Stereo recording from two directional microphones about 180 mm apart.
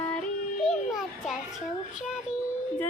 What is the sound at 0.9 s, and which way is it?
Children playing, centre (ahead or behind).